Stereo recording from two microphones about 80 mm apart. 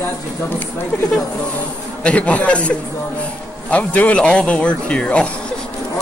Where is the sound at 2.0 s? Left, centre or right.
Centre.